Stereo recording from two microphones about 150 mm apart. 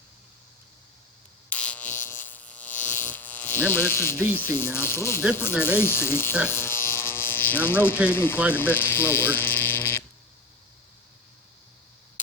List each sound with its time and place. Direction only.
1.5 s electric shaver: 10° left (ahead or behind)
4.3 s speech: 15° left (ahead or behind)
6.5 s electric shaver: 15° left (ahead or behind)
8.1 s speech: 15° left (ahead or behind)